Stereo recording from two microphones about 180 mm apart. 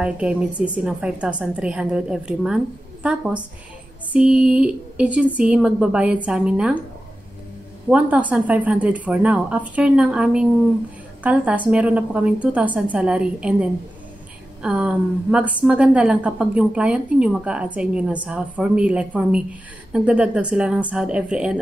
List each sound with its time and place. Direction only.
0.0 s a woman's voice: 5° right (ahead or behind)
7.9 s a woman's voice: 10° right (ahead or behind)